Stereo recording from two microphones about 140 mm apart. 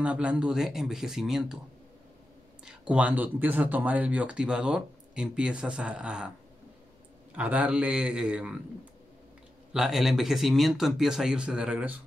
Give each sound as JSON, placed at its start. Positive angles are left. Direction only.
{"t": 0.0, "sound": "speech", "side_deg": -10}
{"t": 2.6, "sound": "speech", "side_deg": -5}
{"t": 7.3, "sound": "speech", "side_deg": -10}
{"t": 9.7, "sound": "speech", "side_deg": -5}